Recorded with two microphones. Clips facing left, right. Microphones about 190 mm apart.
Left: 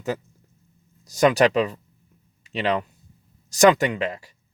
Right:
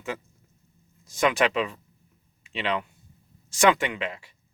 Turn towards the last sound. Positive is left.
turn(degrees=40)  # may be behind; listen again after turning